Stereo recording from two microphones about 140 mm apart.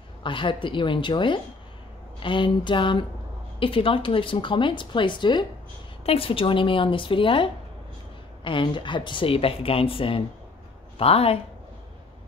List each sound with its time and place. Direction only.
0.2 s a woman's voice: 35° left (ahead or behind)